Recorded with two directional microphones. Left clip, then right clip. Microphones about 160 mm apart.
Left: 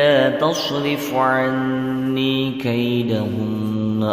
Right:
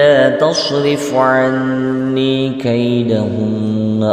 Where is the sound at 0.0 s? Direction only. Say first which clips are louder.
Right 6 dB; 35° right (ahead or behind).